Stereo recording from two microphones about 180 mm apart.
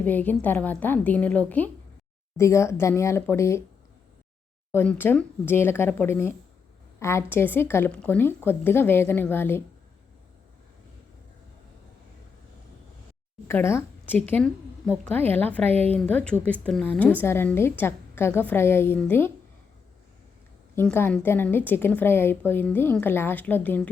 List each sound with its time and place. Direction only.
0.0 s a woman's voice: 10° left (ahead or behind)
4.7 s a woman's voice: 10° left (ahead or behind)
13.5 s a woman's voice: 15° left (ahead or behind)
20.7 s a woman's voice: 10° left (ahead or behind)